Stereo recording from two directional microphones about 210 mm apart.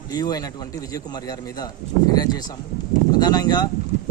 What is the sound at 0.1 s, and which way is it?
A man's voice, 20° left (ahead or behind).